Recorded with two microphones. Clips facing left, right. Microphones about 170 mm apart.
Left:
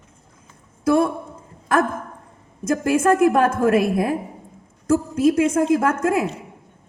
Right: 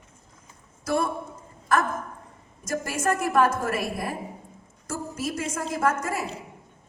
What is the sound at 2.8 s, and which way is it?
A woman's voice, 55° left (ahead or behind).